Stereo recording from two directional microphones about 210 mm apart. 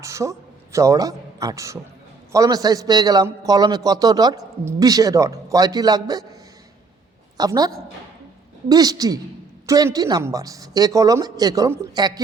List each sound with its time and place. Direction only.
0.0 s a man's voice: 15° right (ahead or behind)
7.3 s a man's voice: 20° right (ahead or behind)